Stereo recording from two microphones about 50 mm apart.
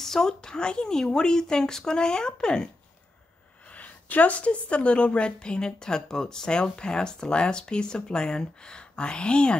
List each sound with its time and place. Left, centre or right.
0.0 s a woman's voice: centre
3.6 s a woman's voice: left